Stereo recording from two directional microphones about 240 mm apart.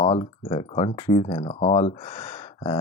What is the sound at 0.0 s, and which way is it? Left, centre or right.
Speech, left.